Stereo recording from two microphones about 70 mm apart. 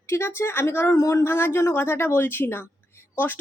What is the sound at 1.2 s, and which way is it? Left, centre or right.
Speech, left.